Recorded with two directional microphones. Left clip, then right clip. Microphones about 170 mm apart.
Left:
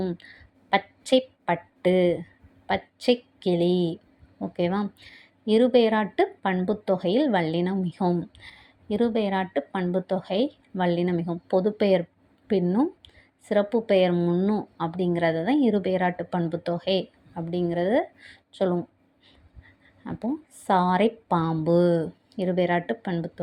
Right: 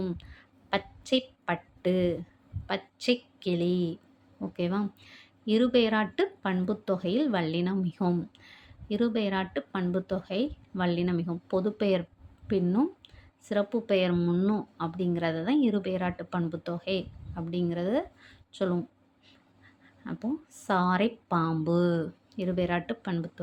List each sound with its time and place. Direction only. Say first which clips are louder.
0.0 s a woman's voice: left 5 dB; 15° left (ahead or behind)
20.1 s speech: left 4 dB; 15° left (ahead or behind)